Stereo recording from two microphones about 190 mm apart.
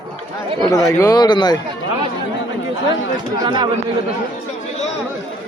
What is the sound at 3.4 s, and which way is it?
Speech, 20° right (ahead or behind).